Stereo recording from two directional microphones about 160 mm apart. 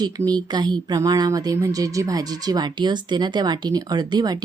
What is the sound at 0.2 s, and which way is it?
Speech, 15° right (ahead or behind).